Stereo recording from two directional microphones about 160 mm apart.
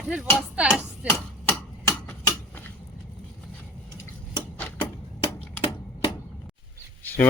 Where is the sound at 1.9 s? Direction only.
20° left (ahead or behind).